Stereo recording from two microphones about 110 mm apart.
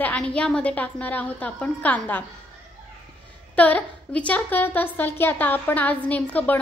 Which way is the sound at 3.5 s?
15° left (ahead or behind).